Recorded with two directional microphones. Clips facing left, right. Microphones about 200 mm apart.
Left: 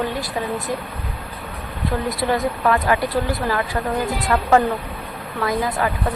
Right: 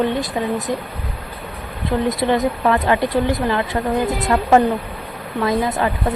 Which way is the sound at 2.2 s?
20° right (ahead or behind).